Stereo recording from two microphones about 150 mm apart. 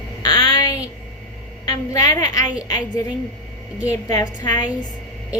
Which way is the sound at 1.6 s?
25° left (ahead or behind).